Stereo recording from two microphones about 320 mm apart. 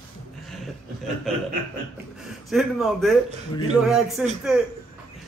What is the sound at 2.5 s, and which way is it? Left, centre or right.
Speech, centre.